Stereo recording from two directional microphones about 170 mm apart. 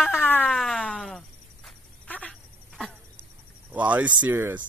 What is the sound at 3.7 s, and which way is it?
Speech, 10° right (ahead or behind).